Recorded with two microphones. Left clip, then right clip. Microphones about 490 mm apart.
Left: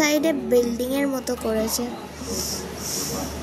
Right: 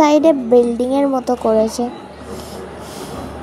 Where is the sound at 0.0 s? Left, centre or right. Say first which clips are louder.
Right 9 dB; left.